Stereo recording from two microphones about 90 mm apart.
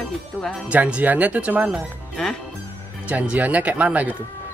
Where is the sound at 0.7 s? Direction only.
15° right (ahead or behind).